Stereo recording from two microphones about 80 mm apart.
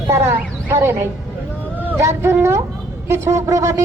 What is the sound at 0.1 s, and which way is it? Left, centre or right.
Speech, right.